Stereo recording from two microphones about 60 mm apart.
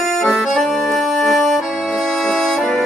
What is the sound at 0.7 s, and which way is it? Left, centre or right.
Accordion, centre.